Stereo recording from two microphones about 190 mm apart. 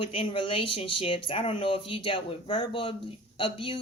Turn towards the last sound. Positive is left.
turn(degrees=25)  # may be behind; listen again after turning